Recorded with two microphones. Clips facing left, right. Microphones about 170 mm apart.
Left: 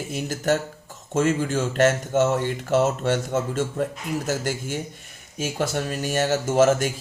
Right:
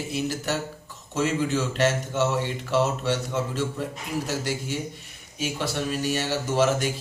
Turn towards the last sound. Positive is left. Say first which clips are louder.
# left 4 dB
turn(degrees=45)  # may be behind; listen again after turning